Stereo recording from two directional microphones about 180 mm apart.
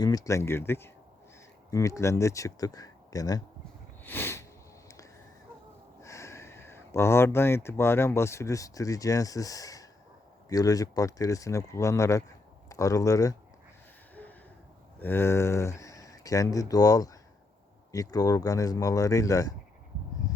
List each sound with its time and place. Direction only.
0.0 s speech: 20° left (ahead or behind)
4.0 s a sound: 10° left (ahead or behind)
6.0 s speech: 15° left (ahead or behind)
14.9 s speech: 10° left (ahead or behind)